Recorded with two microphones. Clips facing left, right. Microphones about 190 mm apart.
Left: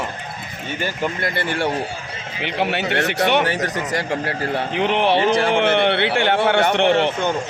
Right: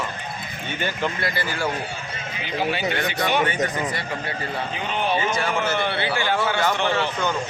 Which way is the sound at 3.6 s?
90° left.